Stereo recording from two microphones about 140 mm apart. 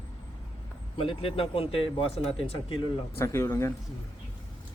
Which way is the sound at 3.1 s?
20° left (ahead or behind).